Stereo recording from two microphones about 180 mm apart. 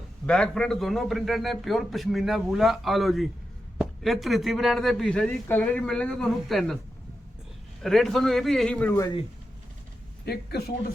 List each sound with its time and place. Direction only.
0.3 s a man's voice: 5° left (ahead or behind)
7.8 s a man's voice: centre (ahead or behind)
10.2 s speech: 60° left (ahead or behind)